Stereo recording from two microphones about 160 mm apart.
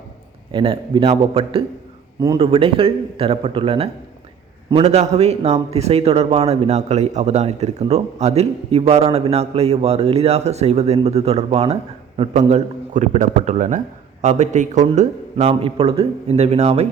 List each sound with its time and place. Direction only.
0.5 s a man's voice: 35° right (ahead or behind)